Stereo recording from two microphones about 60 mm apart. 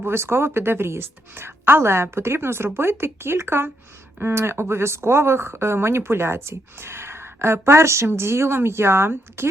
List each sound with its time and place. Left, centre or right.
0.0 s speech: right